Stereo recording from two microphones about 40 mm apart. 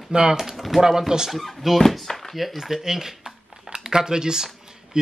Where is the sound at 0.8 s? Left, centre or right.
Centre.